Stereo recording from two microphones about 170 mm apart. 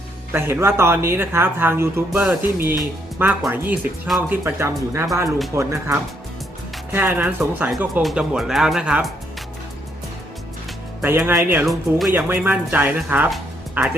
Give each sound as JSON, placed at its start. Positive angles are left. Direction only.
{"t": 0.3, "sound": "speech", "side_deg": -15}
{"t": 11.3, "sound": "speech", "side_deg": -10}
{"t": 11.6, "sound": "speech", "side_deg": 0}
{"t": 12.1, "sound": "speech", "side_deg": -10}